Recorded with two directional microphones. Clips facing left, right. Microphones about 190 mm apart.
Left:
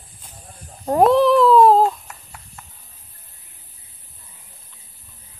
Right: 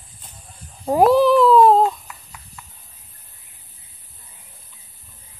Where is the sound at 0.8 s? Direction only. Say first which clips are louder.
Even; 5° right (ahead or behind).